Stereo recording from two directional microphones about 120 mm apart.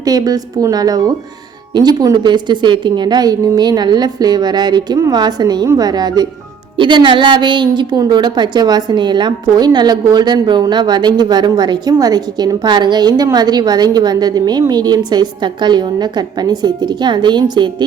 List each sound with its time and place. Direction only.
0.0 s a woman's voice: 30° right (ahead or behind)